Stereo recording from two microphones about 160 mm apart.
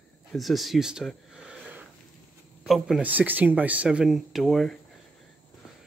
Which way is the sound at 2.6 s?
5° right (ahead or behind).